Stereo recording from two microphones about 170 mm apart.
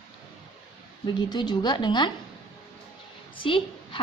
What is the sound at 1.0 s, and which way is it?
A woman's voice, 25° left (ahead or behind).